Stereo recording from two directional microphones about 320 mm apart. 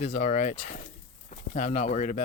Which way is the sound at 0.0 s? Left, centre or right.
Left.